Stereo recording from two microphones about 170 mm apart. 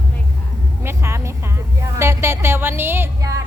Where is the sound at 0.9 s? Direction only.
15° right (ahead or behind).